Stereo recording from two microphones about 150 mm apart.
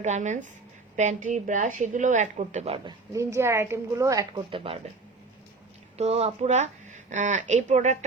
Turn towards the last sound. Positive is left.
turn(degrees=-55)  # may be behind; listen again after turning